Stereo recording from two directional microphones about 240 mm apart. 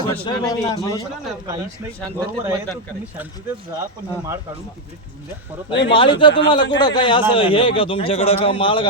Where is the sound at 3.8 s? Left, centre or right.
Centre.